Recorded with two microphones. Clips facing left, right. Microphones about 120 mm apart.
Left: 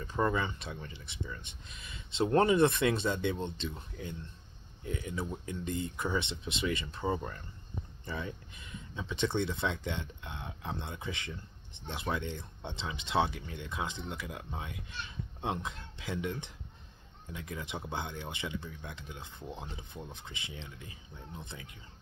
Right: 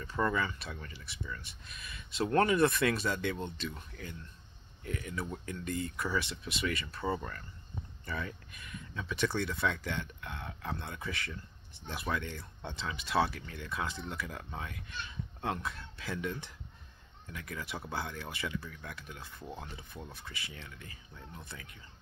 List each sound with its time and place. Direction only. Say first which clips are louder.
0.0 s speech: left 1 dB; 20° left (ahead or behind)
4.8 s speech: left 1 dB; 20° left (ahead or behind)